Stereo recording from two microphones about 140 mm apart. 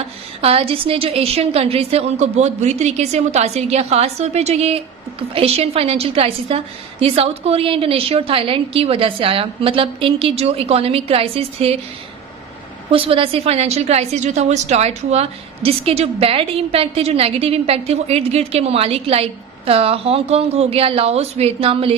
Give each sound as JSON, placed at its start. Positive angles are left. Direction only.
{"t": 0.4, "sound": "a woman's voice", "side_deg": -40}
{"t": 12.9, "sound": "a woman's voice", "side_deg": -40}